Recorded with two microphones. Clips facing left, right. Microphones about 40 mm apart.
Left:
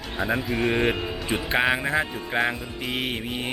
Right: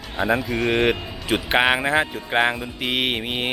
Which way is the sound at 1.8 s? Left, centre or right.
Centre.